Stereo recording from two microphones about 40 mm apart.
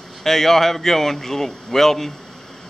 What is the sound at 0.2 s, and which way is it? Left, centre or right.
Speech, centre.